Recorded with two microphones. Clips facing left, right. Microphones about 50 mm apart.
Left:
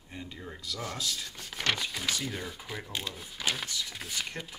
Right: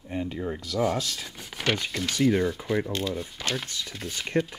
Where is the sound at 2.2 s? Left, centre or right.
Right.